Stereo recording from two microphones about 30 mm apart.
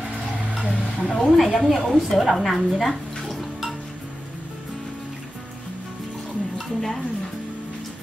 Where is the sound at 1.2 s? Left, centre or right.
Centre.